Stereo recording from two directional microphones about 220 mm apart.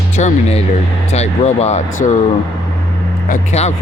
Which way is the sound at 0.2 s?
30° left (ahead or behind).